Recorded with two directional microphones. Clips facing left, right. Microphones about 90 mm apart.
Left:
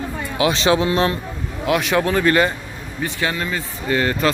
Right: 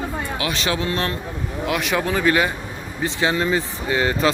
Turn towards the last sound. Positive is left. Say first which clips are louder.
# left 1 dB
turn(degrees=-20)  # may be behind; listen again after turning